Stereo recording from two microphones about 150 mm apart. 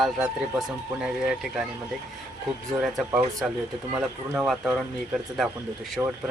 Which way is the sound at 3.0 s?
10° right (ahead or behind).